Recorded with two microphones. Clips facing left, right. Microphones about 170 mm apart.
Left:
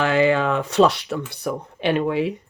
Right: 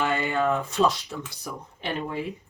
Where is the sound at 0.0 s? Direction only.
90° left.